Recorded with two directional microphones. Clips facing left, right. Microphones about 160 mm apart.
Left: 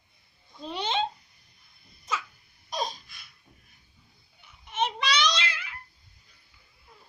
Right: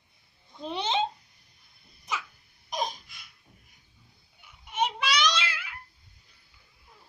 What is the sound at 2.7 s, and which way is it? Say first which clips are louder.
Laughter: even; 15° right (ahead or behind).